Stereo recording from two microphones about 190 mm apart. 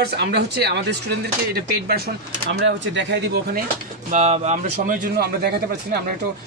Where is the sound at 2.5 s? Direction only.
70° right (ahead or behind).